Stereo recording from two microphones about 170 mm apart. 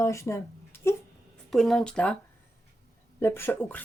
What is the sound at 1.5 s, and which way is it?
Speech, centre (ahead or behind).